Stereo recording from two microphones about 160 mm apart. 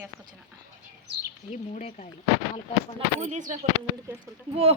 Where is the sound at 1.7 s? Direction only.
45° left (ahead or behind).